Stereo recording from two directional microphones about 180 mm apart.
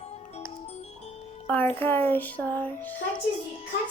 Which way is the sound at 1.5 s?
10° left (ahead or behind).